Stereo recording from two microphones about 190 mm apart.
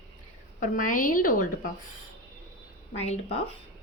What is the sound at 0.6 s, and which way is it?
Speech, 45° left (ahead or behind).